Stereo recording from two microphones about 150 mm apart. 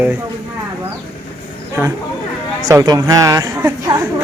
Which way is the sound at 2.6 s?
25° right (ahead or behind).